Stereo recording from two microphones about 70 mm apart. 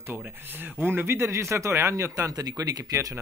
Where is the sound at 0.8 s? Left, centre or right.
Right.